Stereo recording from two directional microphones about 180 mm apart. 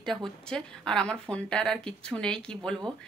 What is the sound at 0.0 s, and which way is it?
Speech, centre (ahead or behind).